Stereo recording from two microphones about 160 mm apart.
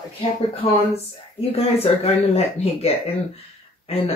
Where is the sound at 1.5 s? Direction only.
40° left (ahead or behind).